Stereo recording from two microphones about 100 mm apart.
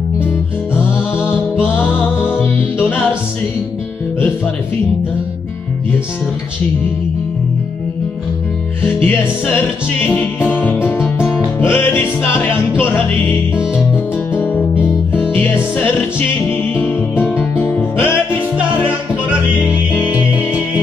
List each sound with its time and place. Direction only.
1.2 s music: 20° left (ahead or behind)
8.8 s music: 20° left (ahead or behind)
19.7 s music: 15° right (ahead or behind)